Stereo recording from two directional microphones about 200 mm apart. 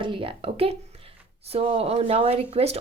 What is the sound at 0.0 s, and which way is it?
A woman's voice, 25° right (ahead or behind).